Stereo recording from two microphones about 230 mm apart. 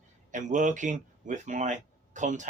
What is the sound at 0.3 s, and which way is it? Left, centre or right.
Speech, right.